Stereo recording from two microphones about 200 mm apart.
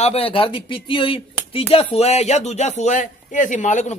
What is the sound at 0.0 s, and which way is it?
Speech, 30° left (ahead or behind).